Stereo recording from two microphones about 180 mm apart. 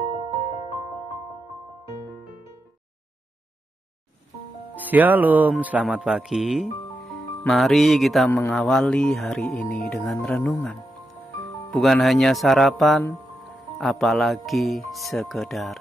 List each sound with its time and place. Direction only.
4.7 s speech: 10° right (ahead or behind)
7.4 s music: centre (ahead or behind)